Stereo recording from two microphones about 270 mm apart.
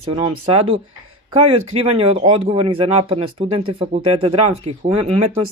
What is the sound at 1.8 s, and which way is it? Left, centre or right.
Speech, centre.